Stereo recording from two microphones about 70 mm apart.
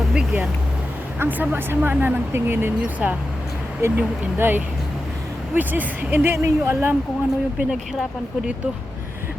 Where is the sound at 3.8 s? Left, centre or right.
Right.